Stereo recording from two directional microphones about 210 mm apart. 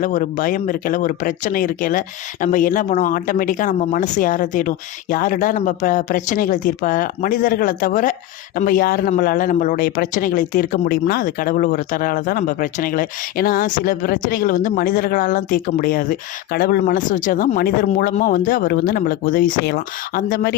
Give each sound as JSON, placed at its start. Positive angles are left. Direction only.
{"t": 0.0, "sound": "speech", "side_deg": 40}